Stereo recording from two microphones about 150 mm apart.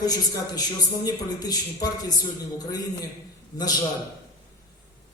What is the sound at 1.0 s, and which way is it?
A man's voice, 25° left (ahead or behind).